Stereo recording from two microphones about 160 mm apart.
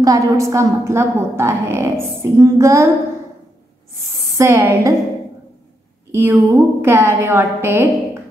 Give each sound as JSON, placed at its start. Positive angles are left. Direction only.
{"t": 0.0, "sound": "a woman's voice", "side_deg": -20}
{"t": 4.4, "sound": "a woman's voice", "side_deg": -20}
{"t": 6.1, "sound": "a woman's voice", "side_deg": -15}